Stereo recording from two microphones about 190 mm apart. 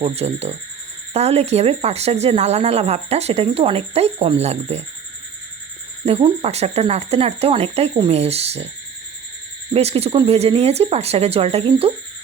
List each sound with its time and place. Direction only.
0.0 s speech: 30° right (ahead or behind)
6.1 s speech: 30° right (ahead or behind)
9.7 s speech: 30° right (ahead or behind)